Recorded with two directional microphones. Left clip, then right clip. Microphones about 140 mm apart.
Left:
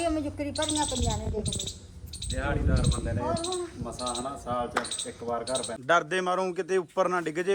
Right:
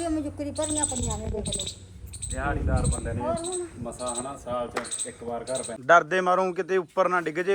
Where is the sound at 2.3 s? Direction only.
15° right (ahead or behind).